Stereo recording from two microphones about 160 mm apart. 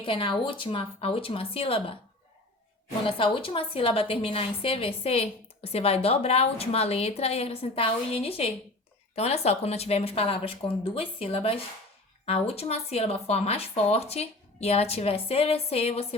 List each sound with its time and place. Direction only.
0.0 s a woman's voice: 35° left (ahead or behind)
3.0 s a woman's voice: 35° left (ahead or behind)